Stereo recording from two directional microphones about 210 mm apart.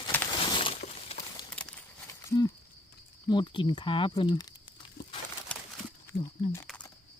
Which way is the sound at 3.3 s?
20° left (ahead or behind).